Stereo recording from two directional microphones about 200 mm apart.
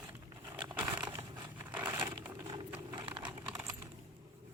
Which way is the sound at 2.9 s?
25° right (ahead or behind).